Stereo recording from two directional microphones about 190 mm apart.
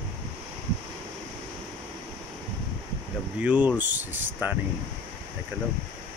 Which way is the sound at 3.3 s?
10° right (ahead or behind).